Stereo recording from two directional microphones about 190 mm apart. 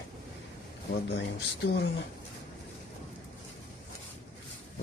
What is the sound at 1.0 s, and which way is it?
Speech, 60° left (ahead or behind).